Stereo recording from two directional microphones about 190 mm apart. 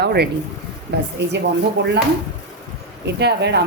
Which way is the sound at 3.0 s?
60° right (ahead or behind).